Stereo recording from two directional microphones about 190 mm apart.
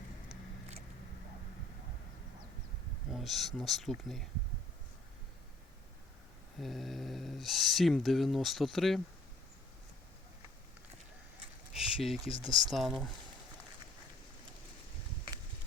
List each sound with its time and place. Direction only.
3.1 s speech: centre (ahead or behind)
6.6 s speech: centre (ahead or behind)
11.7 s a sound: 5° right (ahead or behind)
12.4 s speech: 20° right (ahead or behind)
12.7 s speech: centre (ahead or behind)